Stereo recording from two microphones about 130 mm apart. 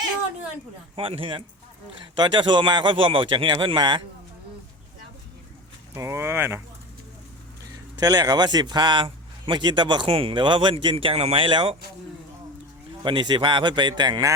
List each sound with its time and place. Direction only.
0.9 s a man's voice: 45° right (ahead or behind)
5.9 s speech: 20° right (ahead or behind)
7.9 s a man's voice: 30° right (ahead or behind)
13.0 s a man's voice: 35° right (ahead or behind)